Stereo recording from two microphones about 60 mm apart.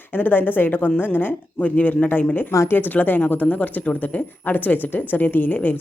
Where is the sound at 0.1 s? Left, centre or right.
Left.